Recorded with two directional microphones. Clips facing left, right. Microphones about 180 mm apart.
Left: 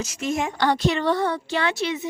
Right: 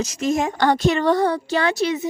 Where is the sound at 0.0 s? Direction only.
40° right (ahead or behind).